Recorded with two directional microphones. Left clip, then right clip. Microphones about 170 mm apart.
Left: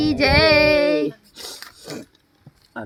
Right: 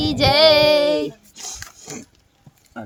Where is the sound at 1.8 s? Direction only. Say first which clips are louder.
Left 2 dB; 20° right (ahead or behind).